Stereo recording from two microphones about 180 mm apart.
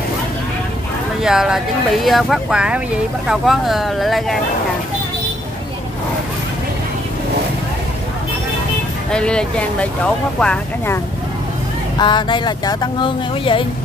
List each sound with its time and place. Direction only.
1.2 s speech: 5° right (ahead or behind)
9.1 s speech: 5° left (ahead or behind)
12.0 s speech: 25° left (ahead or behind)